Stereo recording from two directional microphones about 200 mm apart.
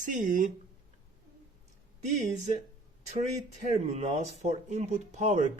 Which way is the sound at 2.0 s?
35° right (ahead or behind).